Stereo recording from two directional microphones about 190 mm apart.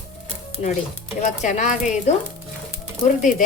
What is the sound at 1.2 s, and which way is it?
Speech, 40° left (ahead or behind).